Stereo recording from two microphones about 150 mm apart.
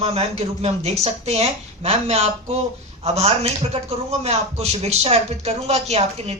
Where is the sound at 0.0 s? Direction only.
45° right (ahead or behind).